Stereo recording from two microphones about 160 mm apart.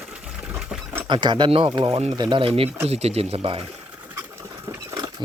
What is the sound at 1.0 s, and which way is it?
Speech, 30° right (ahead or behind).